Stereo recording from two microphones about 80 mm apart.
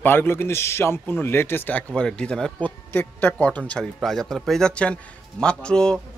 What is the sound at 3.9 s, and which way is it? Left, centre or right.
A man's voice, centre.